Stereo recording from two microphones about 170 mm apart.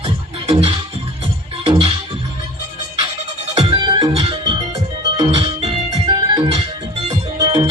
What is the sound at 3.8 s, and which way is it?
Music, 25° right (ahead or behind).